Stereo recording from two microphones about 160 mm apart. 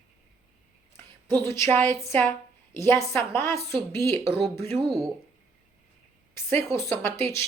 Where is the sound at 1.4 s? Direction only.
15° left (ahead or behind).